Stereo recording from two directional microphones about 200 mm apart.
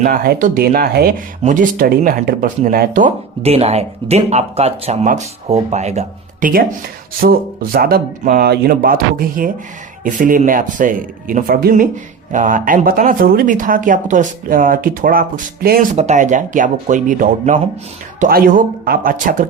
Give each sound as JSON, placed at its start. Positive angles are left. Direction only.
{"t": 0.0, "sound": "speech", "side_deg": -45}